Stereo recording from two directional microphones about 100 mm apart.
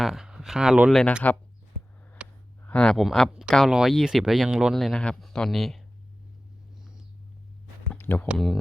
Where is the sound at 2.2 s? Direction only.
10° right (ahead or behind).